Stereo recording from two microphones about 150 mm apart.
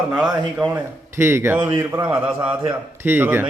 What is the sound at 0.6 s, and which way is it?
A man's voice, 15° right (ahead or behind).